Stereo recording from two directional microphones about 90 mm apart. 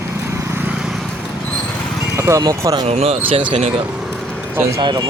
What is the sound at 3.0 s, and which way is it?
Speech, 90° right.